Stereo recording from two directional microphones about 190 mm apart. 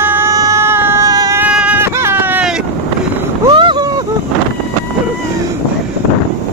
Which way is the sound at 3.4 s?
25° right (ahead or behind).